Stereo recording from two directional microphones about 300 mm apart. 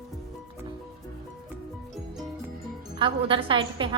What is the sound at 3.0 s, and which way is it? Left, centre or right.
Speech, centre.